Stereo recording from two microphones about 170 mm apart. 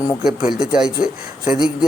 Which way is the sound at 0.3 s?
5° right (ahead or behind).